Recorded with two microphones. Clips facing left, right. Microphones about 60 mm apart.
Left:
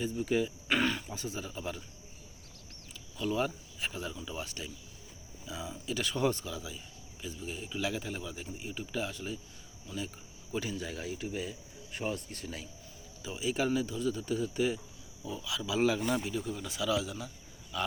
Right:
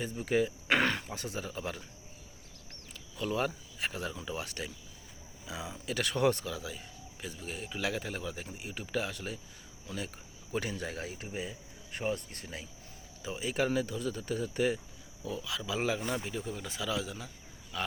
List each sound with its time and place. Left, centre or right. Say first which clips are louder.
0.0 s speech: right 1 dB; right
2.9 s speech: left 1 dB; right